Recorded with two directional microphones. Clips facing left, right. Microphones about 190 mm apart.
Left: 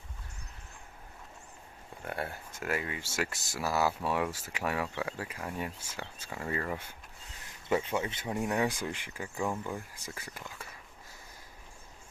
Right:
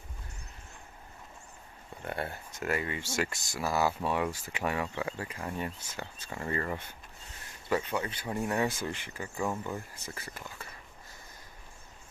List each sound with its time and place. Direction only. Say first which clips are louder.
2.0 s speech: right 1 dB; 5° left (ahead or behind)
7.7 s speech: left 1 dB; 25° left (ahead or behind)
8.3 s speech: even; 10° left (ahead or behind)